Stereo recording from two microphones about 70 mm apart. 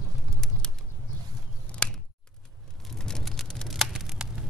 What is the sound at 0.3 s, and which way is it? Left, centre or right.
Bird, centre.